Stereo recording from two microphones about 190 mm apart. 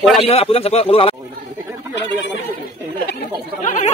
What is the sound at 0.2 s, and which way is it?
Speech, 30° left (ahead or behind).